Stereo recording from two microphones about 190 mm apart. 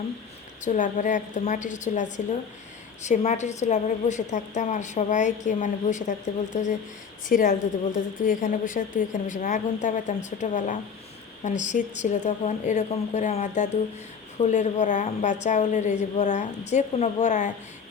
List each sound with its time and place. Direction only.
0.6 s a woman's voice: 40° left (ahead or behind)